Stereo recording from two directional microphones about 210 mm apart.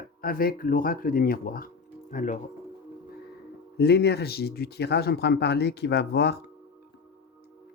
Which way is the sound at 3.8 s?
50° left (ahead or behind).